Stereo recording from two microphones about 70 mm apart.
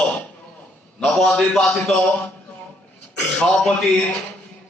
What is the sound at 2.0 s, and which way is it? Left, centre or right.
Speech, left.